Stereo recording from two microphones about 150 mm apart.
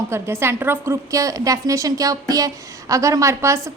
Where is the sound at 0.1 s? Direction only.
15° right (ahead or behind).